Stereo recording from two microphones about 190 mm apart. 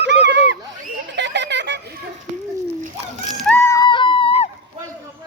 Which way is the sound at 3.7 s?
25° left (ahead or behind).